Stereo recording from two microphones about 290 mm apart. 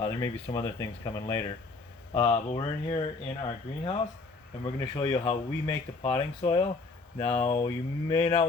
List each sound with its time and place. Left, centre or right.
0.0 s speech: centre